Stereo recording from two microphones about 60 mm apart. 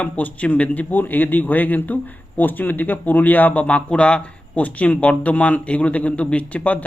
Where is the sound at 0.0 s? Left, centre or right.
Left.